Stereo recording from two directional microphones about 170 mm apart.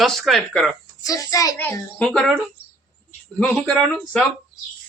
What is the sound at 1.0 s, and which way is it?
A child's voice, 20° left (ahead or behind).